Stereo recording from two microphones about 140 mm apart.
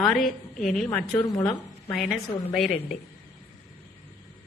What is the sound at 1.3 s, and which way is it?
Speech, 25° left (ahead or behind).